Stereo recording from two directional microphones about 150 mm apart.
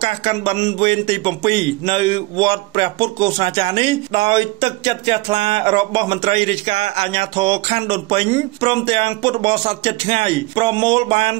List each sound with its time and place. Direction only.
0.0 s speech: 40° right (ahead or behind)